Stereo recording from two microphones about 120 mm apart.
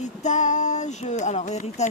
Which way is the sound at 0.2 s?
80° left.